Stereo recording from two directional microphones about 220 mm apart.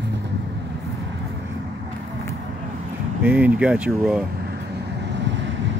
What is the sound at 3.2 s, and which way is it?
Speech, 10° right (ahead or behind).